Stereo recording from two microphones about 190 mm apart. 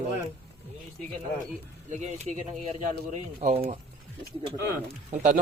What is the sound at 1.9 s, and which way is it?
Speech, 35° right (ahead or behind).